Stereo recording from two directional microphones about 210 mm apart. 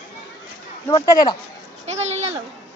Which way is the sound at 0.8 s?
20° left (ahead or behind).